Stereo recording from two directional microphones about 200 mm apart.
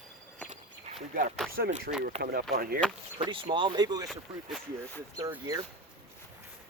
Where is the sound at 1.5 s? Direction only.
40° right (ahead or behind).